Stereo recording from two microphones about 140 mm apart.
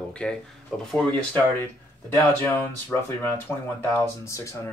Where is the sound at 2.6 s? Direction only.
15° left (ahead or behind).